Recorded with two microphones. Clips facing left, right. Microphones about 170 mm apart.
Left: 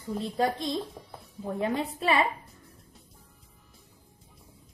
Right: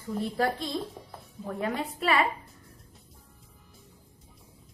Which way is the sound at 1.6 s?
20° left (ahead or behind).